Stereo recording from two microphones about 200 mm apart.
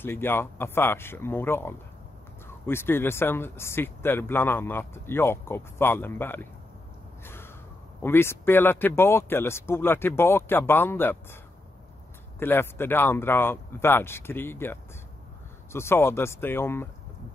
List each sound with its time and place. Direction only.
0.0 s speech: 10° left (ahead or behind)
7.2 s a sound: 10° left (ahead or behind)
8.0 s speech: 10° left (ahead or behind)
12.4 s speech: 10° left (ahead or behind)